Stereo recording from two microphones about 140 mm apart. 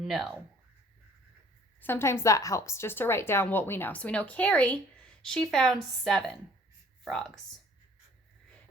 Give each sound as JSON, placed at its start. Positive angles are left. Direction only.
{"t": 0.0, "sound": "speech", "side_deg": 0}
{"t": 1.8, "sound": "a woman's voice", "side_deg": 15}